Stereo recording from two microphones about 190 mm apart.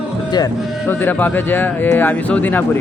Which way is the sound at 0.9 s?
10° left (ahead or behind).